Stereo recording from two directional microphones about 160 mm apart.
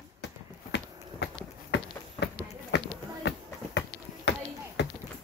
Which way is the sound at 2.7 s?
90° left.